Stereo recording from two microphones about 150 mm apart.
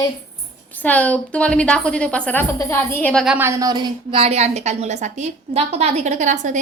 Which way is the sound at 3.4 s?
20° right (ahead or behind).